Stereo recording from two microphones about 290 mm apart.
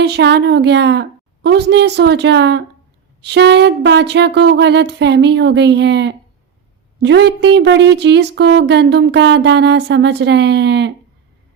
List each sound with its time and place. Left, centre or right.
0.0 s speech: right